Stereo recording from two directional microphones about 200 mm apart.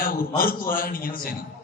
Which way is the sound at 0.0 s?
45° left (ahead or behind).